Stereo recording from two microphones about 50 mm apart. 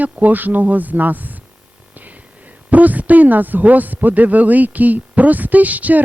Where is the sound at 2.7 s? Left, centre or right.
Right.